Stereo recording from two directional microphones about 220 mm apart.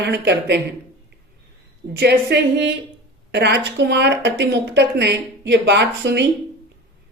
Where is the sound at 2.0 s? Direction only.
50° right (ahead or behind).